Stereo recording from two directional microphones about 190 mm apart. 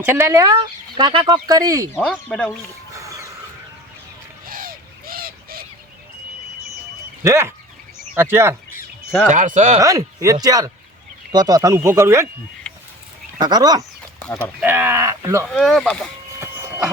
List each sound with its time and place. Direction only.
0.0 s speech: 10° right (ahead or behind)
2.0 s speech: 5° left (ahead or behind)
2.9 s a sound: 15° right (ahead or behind)
4.4 s bird: 50° right (ahead or behind)
7.3 s speech: 15° right (ahead or behind)
9.3 s speech: 40° right (ahead or behind)
9.8 s speech: 15° right (ahead or behind)
12.7 s a sound: 5° left (ahead or behind)
13.4 s speech: 20° right (ahead or behind)
15.4 s speech: centre (ahead or behind)